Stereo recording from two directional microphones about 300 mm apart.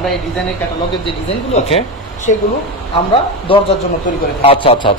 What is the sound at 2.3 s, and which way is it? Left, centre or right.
Speech, left.